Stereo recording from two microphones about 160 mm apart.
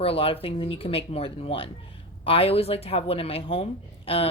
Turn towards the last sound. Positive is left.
turn(degrees=35)  # may be behind; listen again after turning